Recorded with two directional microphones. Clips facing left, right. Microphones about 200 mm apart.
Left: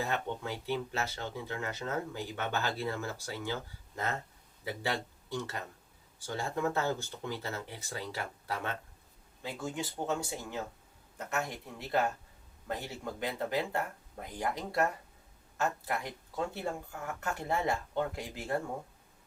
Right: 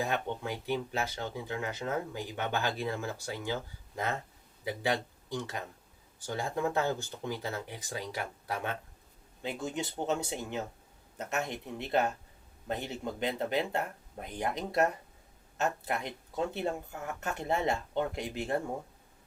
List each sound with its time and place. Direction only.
0.0 s speech: 15° right (ahead or behind)